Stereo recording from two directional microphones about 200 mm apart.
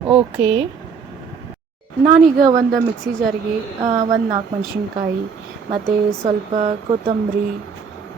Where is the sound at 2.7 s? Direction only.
Centre (ahead or behind).